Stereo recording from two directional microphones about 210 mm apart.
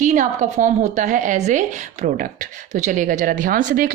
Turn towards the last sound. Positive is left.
turn(degrees=-40)  # may be behind; listen again after turning